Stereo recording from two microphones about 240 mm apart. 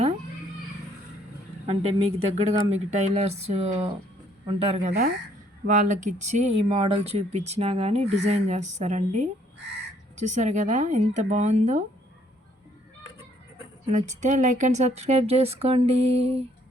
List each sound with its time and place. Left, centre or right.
1.6 s speech: right
13.9 s speech: right